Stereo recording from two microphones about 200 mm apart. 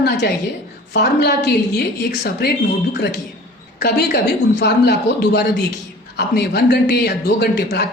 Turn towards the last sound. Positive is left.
turn(degrees=55)  # may be behind; listen again after turning